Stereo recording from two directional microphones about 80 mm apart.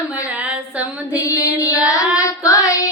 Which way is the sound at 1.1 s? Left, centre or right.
Left.